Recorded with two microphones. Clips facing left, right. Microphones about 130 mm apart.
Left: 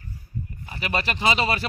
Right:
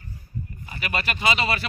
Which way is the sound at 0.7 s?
30° left (ahead or behind).